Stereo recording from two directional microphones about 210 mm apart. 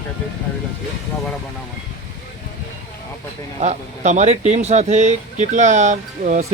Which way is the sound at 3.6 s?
35° right (ahead or behind).